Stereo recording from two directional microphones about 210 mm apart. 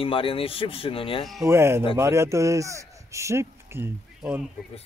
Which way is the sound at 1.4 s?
10° right (ahead or behind).